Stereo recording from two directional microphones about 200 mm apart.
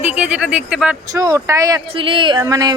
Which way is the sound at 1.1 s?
15° right (ahead or behind).